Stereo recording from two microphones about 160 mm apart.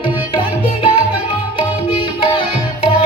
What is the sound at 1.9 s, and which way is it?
Music, 35° left (ahead or behind).